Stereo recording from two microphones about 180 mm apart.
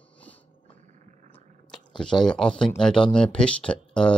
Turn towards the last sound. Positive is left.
turn(degrees=5)  # may be behind; listen again after turning